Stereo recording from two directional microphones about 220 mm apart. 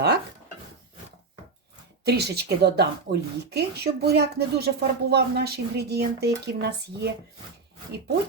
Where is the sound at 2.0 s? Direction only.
45° right (ahead or behind).